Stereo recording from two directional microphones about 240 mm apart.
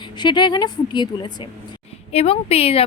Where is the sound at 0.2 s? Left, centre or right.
Centre.